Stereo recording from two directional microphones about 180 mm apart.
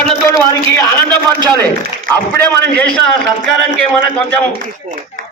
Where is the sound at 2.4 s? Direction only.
60° right (ahead or behind).